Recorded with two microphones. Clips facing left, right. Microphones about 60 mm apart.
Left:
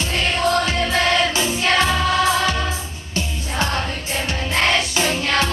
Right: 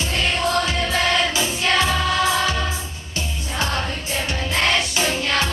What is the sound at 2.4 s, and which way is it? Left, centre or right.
Music, centre.